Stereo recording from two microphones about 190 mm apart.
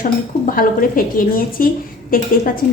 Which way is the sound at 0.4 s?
50° left (ahead or behind).